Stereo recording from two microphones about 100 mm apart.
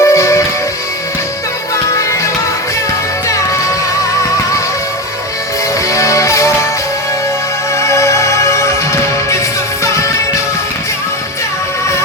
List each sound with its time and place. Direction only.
0.0 s music: 30° left (ahead or behind)
5.9 s music: 30° left (ahead or behind)
7.8 s music: 30° left (ahead or behind)